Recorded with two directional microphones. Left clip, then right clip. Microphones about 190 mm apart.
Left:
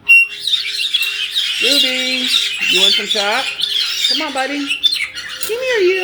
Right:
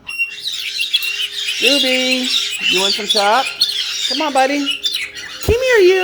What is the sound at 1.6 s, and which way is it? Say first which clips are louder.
Speech: right 2 dB; 30° right (ahead or behind).